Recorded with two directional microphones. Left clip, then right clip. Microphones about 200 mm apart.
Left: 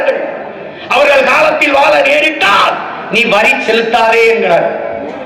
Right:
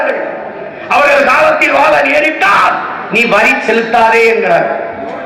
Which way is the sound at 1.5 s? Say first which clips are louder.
Even; 15° left (ahead or behind).